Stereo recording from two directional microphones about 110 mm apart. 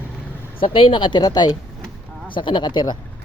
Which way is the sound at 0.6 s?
55° left (ahead or behind).